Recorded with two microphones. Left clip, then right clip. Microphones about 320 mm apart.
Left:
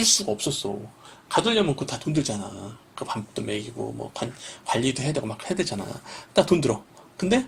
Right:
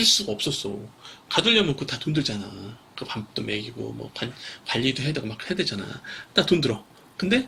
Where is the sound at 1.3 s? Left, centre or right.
Centre.